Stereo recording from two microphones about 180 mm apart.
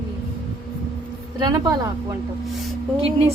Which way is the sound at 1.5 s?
20° right (ahead or behind).